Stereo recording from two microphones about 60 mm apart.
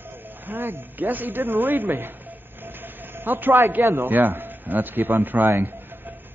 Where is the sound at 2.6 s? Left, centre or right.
Right.